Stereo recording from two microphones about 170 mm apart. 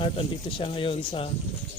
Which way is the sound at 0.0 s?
35° left (ahead or behind).